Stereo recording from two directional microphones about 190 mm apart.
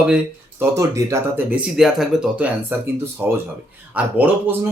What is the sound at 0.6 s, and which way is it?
Speech, 15° right (ahead or behind).